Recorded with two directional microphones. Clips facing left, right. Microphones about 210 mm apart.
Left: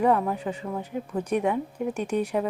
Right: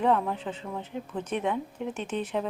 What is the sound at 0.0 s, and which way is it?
A woman's voice, 5° left (ahead or behind).